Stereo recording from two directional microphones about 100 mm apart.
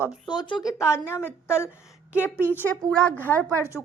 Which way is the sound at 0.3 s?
45° left (ahead or behind).